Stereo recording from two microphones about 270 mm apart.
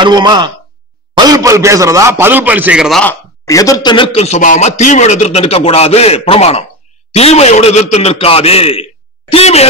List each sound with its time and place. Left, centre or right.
0.0 s a man's voice: centre; by 9.7 s left